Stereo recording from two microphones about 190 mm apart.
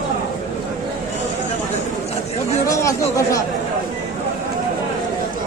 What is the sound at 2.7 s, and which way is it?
Speech, 15° left (ahead or behind).